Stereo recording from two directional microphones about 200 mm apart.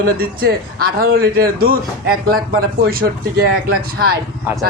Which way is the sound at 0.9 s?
50° right (ahead or behind).